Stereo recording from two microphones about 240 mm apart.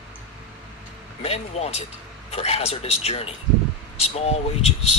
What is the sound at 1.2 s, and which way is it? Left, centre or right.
Speech, left.